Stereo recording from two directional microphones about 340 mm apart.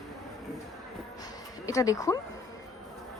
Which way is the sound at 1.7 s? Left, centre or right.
Centre.